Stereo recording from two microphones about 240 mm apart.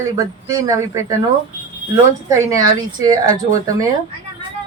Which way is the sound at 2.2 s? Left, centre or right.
Centre.